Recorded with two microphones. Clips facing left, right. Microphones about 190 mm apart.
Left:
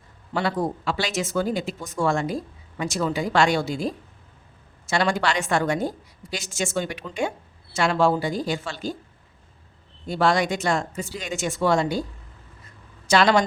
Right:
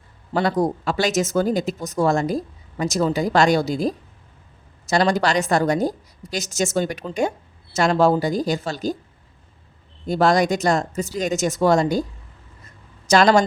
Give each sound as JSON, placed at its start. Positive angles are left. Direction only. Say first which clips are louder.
{"t": 0.3, "sound": "speech", "louder": "right 5 dB", "side_deg": -40}
{"t": 10.1, "sound": "speech", "louder": "right 4 dB", "side_deg": -40}
{"t": 13.1, "sound": "a woman's voice", "louder": "right 3 dB", "side_deg": -45}